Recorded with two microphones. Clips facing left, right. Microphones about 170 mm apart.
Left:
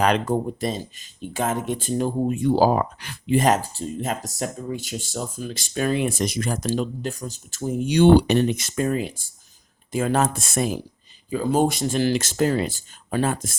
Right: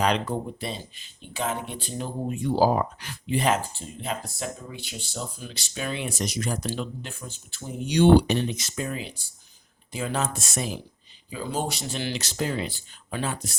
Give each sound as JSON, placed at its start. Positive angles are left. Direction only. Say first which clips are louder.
{"t": 0.0, "sound": "speech", "louder": "left 4 dB", "side_deg": 50}
{"t": 3.3, "sound": "speech", "louder": "left 5 dB", "side_deg": 40}